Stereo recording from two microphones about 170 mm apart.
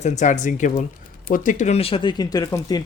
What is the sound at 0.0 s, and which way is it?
Speech, 45° left (ahead or behind).